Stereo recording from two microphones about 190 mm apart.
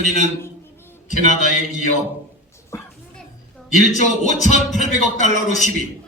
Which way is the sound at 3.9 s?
40° left (ahead or behind).